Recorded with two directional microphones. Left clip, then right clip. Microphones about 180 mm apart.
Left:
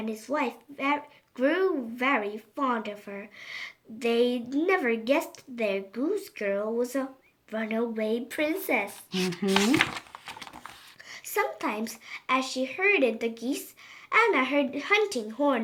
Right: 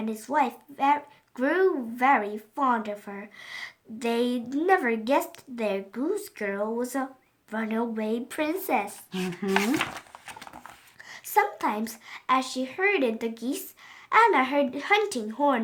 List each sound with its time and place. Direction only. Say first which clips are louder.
0.0 s a child's voice: right 4 dB; 50° right (ahead or behind)
9.1 s speech: left 3 dB; centre (ahead or behind)
9.9 s crumpling: left 2 dB; 25° right (ahead or behind)
11.1 s a child's voice: right 5 dB; 50° right (ahead or behind)